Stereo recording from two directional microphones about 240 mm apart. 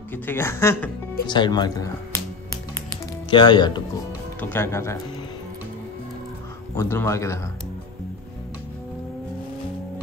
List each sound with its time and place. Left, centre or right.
0.1 s a woman's voice: centre
1.2 s music: centre
4.4 s a woman's voice: centre
6.8 s a woman's voice: centre